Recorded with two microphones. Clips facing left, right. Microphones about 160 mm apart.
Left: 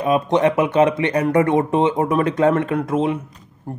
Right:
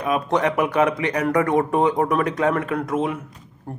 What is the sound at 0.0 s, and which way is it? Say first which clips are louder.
A man's voice: left 4 dB; 25° left (ahead or behind).